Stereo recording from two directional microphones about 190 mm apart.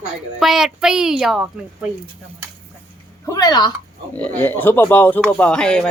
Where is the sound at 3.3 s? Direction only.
20° left (ahead or behind).